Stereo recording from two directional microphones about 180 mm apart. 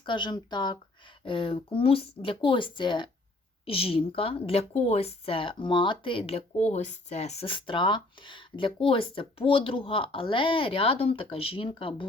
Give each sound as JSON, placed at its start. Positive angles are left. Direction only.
{"t": 0.0, "sound": "speech", "side_deg": 25}